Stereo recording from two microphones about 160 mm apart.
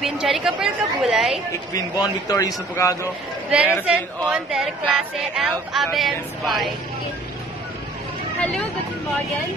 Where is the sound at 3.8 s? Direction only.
5° right (ahead or behind).